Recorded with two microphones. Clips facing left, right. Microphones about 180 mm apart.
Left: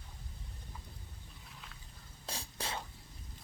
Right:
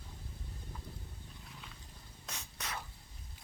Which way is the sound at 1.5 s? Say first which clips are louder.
Even; centre (ahead or behind).